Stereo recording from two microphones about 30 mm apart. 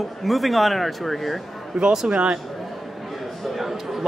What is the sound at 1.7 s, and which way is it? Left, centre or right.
Speech, right.